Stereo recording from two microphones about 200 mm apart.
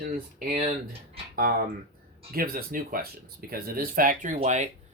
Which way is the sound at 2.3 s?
50° right (ahead or behind).